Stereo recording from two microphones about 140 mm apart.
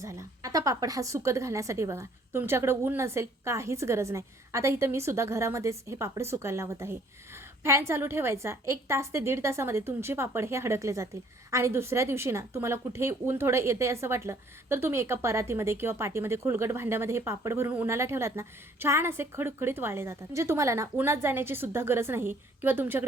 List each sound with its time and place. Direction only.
0.0 s a woman's voice: 20° right (ahead or behind)